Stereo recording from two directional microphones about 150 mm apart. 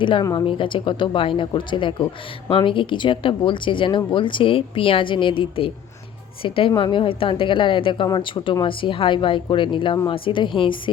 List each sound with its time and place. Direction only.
0.0 s a woman's voice: 30° left (ahead or behind)